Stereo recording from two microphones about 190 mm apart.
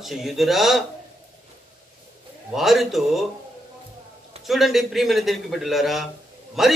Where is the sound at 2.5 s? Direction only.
Centre (ahead or behind).